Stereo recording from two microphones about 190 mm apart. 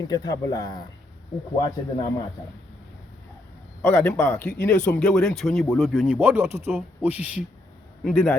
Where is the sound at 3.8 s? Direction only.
10° left (ahead or behind); by 7.4 s 10° right (ahead or behind).